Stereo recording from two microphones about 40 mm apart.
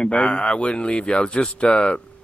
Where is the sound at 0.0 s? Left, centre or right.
Left.